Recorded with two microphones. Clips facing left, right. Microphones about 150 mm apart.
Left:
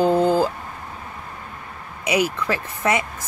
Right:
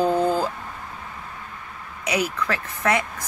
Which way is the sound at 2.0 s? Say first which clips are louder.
Left 3 dB; 10° left (ahead or behind).